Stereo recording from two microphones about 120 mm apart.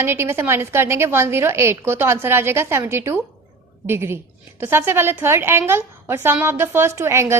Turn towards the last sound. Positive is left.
turn(degrees=-20)  # may be behind; listen again after turning